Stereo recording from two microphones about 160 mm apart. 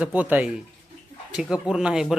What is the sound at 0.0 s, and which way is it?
A man's voice, 10° right (ahead or behind).